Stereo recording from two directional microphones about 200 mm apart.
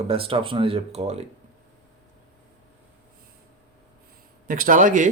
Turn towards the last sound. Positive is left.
turn(degrees=-40)  # may be behind; listen again after turning